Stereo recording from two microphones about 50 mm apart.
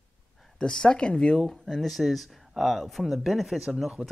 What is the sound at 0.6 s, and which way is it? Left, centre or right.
Speech, centre.